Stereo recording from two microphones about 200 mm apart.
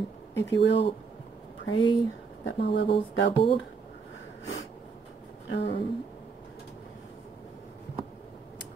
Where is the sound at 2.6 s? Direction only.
60° left (ahead or behind).